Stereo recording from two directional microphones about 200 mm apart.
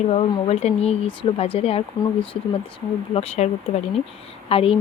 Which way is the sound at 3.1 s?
30° left (ahead or behind).